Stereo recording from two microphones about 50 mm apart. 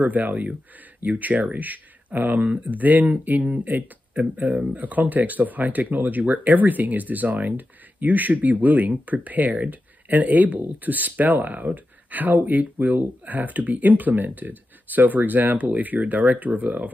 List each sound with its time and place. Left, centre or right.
0.0 s speech: right